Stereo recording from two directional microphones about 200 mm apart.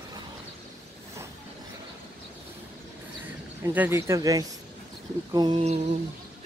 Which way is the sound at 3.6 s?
10° right (ahead or behind).